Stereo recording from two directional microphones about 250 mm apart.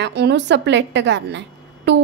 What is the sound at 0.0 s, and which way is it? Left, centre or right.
A woman's voice, right.